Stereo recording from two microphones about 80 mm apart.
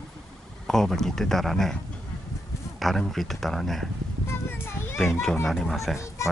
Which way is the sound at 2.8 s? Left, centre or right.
Centre.